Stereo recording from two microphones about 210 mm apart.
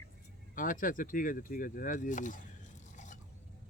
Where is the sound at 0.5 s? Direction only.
40° left (ahead or behind).